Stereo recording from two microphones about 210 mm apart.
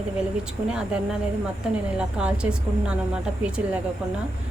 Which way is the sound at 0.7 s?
5° right (ahead or behind).